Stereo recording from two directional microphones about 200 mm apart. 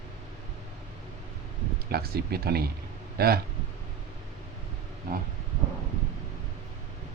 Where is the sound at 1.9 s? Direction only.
50° right (ahead or behind).